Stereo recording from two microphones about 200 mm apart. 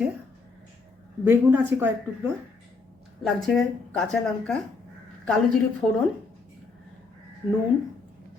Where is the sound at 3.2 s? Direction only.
Centre (ahead or behind).